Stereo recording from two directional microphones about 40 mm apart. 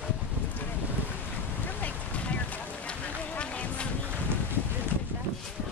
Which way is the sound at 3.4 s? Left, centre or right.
Left.